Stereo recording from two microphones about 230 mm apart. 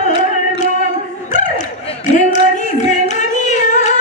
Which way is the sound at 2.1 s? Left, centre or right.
Left.